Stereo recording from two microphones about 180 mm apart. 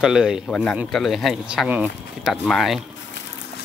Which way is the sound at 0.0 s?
5° right (ahead or behind).